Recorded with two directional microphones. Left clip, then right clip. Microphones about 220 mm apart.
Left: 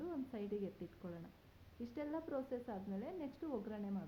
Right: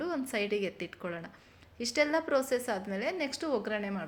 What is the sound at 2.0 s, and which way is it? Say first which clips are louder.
A woman's voice: right 15 dB; 25° right (ahead or behind).